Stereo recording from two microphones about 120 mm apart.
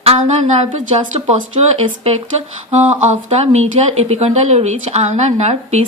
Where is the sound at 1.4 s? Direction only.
65° right (ahead or behind).